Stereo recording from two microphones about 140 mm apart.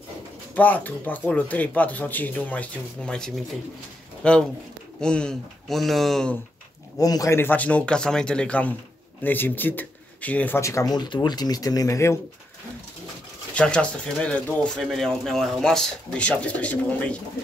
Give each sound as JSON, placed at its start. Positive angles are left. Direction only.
{"t": 0.6, "sound": "speech", "side_deg": 10}
{"t": 7.0, "sound": "speech", "side_deg": 25}
{"t": 13.6, "sound": "speech", "side_deg": 5}